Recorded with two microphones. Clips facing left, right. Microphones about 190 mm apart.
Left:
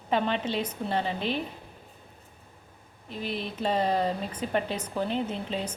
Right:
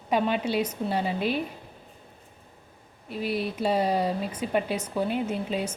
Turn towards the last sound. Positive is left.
turn(degrees=-10)  # may be behind; listen again after turning